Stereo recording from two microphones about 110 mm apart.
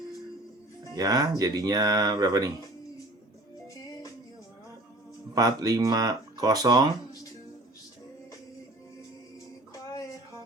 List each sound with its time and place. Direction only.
0.9 s speech: 35° right (ahead or behind)
5.3 s speech: 35° right (ahead or behind)
9.7 s music: 30° left (ahead or behind)